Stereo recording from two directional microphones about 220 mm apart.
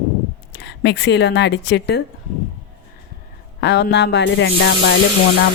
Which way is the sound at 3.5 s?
50° left (ahead or behind).